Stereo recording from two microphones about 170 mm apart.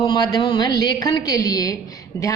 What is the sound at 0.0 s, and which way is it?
A woman's voice, 25° left (ahead or behind).